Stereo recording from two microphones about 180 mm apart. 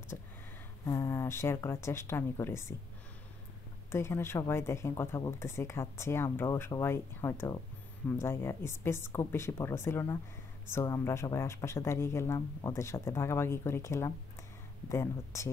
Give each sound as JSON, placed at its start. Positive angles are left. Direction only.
{"t": 0.8, "sound": "speech", "side_deg": 15}
{"t": 3.9, "sound": "speech", "side_deg": 15}